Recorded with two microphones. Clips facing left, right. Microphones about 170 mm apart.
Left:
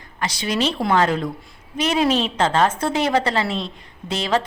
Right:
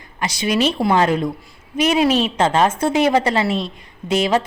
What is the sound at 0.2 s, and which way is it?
Speech, 15° right (ahead or behind).